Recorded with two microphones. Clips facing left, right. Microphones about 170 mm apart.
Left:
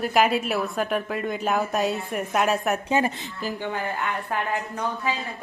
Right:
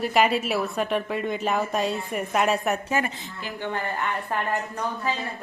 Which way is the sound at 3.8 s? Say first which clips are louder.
Even; centre (ahead or behind).